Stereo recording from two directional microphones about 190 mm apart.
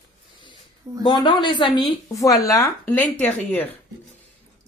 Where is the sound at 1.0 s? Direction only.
25° left (ahead or behind).